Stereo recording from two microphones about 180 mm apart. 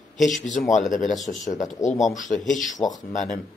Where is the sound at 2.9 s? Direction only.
45° left (ahead or behind).